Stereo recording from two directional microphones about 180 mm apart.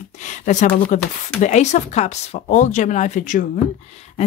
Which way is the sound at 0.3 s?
40° left (ahead or behind).